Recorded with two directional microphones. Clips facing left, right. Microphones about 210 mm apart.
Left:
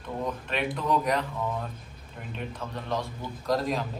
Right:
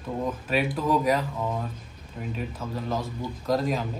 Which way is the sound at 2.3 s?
5° right (ahead or behind).